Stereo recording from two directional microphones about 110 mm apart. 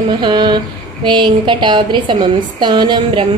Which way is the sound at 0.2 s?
45° right (ahead or behind).